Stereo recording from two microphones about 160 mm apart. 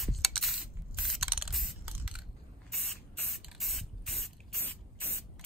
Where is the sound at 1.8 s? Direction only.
10° right (ahead or behind).